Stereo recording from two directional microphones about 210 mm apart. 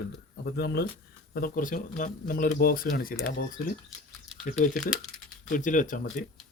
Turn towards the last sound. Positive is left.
turn(degrees=40)  # may be behind; listen again after turning